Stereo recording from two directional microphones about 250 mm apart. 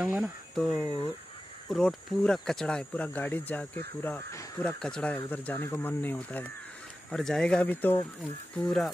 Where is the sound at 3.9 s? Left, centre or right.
Centre.